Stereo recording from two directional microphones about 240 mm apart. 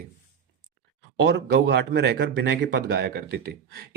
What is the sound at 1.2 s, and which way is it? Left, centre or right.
Speech, right.